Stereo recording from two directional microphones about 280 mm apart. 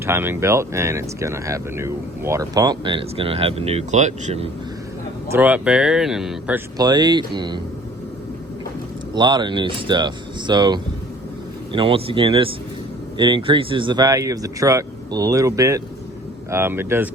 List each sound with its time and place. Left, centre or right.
0.0 s speech: centre; by 4.4 s right
5.3 s speech: centre
6.7 s speech: centre
9.1 s speech: centre